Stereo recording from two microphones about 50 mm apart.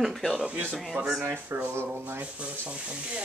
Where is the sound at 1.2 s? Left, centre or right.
Right.